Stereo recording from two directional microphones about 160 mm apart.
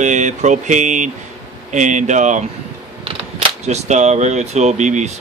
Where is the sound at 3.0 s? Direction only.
35° right (ahead or behind).